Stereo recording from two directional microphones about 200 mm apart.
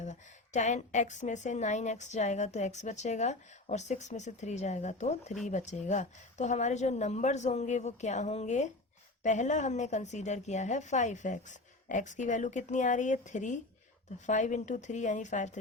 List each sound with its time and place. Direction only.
0.0 s a woman's voice: 35° left (ahead or behind)